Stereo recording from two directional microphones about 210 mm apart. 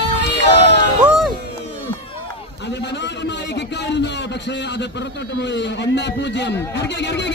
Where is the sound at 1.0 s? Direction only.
Centre (ahead or behind).